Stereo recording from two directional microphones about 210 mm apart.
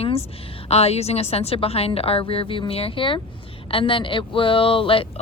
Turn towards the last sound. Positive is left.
turn(degrees=25)  # may be behind; listen again after turning